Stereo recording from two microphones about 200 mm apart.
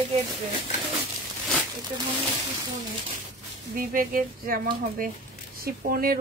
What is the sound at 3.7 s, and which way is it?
Speech, 45° right (ahead or behind).